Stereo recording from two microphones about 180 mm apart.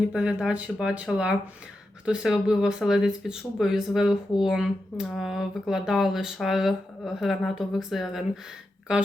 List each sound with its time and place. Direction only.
0.1 s speech: 5° right (ahead or behind)